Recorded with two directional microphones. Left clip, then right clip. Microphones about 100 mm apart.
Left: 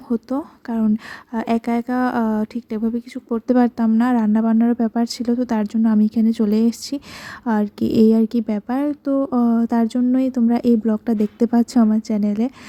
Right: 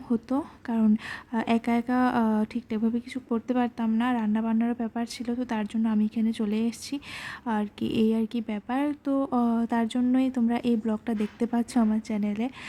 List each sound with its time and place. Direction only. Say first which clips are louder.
0.1 s a woman's voice: left 5 dB; 50° left (ahead or behind)